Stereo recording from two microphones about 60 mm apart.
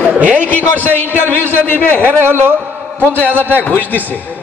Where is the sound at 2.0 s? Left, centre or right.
Right.